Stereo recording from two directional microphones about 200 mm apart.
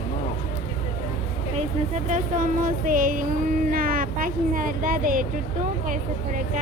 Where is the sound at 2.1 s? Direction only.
40° right (ahead or behind).